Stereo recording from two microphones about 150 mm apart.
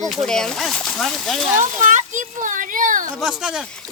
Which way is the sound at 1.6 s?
55° right (ahead or behind).